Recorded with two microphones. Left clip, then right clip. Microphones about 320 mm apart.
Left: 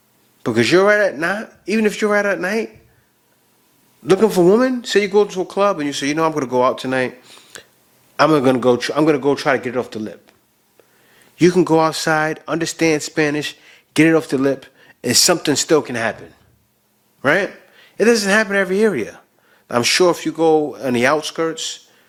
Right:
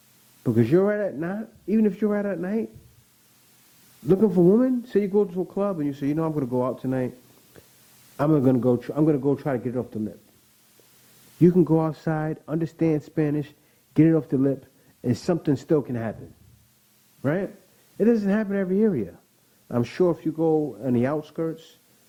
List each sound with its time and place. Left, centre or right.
0.4 s speech: centre
4.0 s speech: centre
8.1 s speech: centre
11.3 s a man's voice: centre